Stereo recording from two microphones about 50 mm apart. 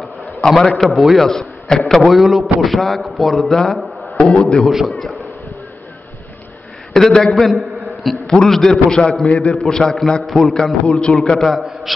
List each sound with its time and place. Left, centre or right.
0.5 s a man's voice: centre
0.8 s a man's voice: centre
3.5 s a sound: centre
4.2 s a man's voice: left
4.6 s speech: centre
6.9 s a man's voice: centre
7.2 s a man's voice: centre